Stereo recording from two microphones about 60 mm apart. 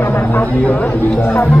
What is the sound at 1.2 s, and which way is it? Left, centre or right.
Speech, left.